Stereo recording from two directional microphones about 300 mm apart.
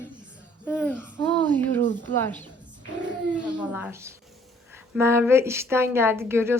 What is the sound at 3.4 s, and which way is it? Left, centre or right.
A woman's voice, centre.